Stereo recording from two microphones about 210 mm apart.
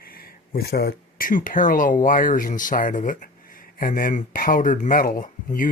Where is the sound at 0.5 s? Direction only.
50° left (ahead or behind).